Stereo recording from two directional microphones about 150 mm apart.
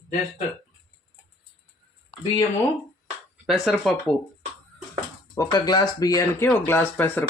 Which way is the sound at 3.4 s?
Centre (ahead or behind).